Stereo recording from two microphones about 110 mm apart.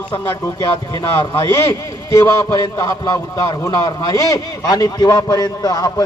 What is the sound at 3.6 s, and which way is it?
A man's voice, 30° left (ahead or behind).